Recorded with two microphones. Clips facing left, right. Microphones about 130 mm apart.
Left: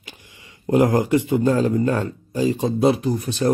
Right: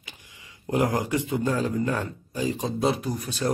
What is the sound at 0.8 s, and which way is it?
Speech, 70° left (ahead or behind).